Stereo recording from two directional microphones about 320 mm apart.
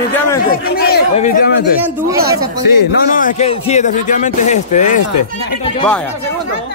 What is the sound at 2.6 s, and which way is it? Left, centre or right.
Speech, left.